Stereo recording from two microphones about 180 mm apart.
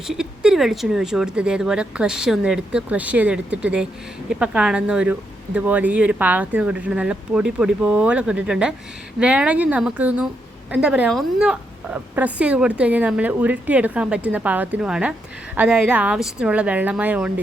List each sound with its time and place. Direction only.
0.1 s speech: 5° right (ahead or behind)